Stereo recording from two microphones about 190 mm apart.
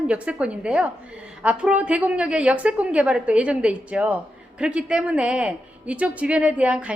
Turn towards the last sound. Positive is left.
turn(degrees=-5)  # may be behind; listen again after turning